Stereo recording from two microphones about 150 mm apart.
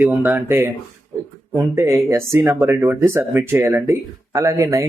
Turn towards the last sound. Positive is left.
turn(degrees=-20)  # may be behind; listen again after turning